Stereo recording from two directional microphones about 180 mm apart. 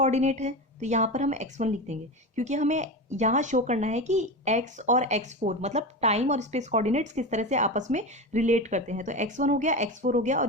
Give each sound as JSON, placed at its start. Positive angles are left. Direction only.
{"t": 0.0, "sound": "a woman's voice", "side_deg": -40}